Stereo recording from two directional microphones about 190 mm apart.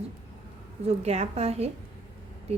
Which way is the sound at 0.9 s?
35° right (ahead or behind).